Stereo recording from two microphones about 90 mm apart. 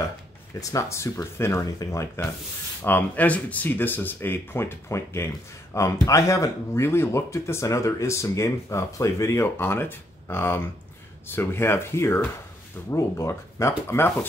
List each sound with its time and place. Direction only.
0.6 s speech: 40° left (ahead or behind)
2.8 s speech: 20° left (ahead or behind)